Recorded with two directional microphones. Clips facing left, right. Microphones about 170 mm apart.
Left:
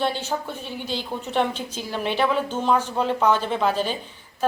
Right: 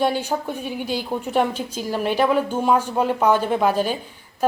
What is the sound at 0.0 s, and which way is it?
Speech, 10° right (ahead or behind).